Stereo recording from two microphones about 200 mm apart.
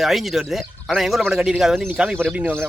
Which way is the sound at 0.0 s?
Centre (ahead or behind).